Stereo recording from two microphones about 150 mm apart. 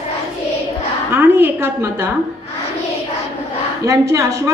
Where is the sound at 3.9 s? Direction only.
20° right (ahead or behind).